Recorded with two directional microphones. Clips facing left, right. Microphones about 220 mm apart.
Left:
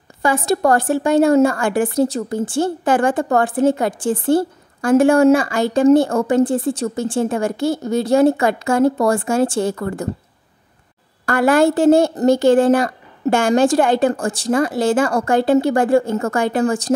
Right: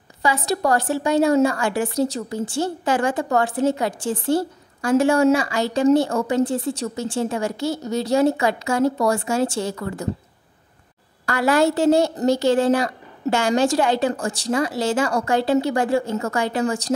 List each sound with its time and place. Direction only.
0.2 s a woman's voice: 50° left (ahead or behind)
11.2 s a woman's voice: 50° left (ahead or behind)